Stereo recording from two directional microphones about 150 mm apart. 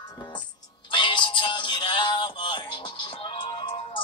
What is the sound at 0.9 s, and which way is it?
Music, 35° left (ahead or behind).